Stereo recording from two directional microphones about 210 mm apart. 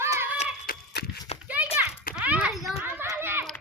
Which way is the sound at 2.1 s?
5° right (ahead or behind).